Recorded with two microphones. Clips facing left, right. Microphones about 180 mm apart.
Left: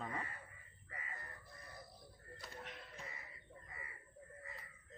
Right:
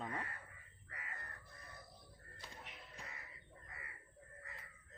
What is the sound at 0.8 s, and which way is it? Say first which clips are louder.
Crow: left 2 dB; 65° right (ahead or behind).